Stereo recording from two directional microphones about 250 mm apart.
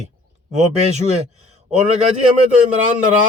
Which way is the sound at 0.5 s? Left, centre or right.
Right.